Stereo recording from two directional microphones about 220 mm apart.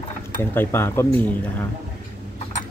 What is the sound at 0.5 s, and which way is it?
Speech, 10° left (ahead or behind).